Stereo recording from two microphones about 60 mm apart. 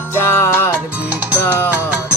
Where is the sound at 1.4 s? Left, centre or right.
Left.